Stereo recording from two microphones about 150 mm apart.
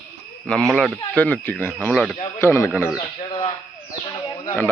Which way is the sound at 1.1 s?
10° left (ahead or behind).